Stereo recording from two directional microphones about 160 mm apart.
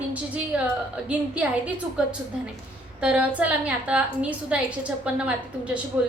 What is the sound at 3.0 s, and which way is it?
A woman's voice, 5° right (ahead or behind).